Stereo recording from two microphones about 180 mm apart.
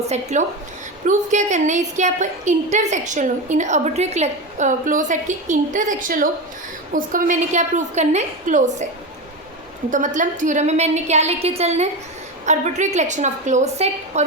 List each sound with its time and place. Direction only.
0.1 s a woman's voice: 40° right (ahead or behind)
9.9 s a woman's voice: 45° right (ahead or behind)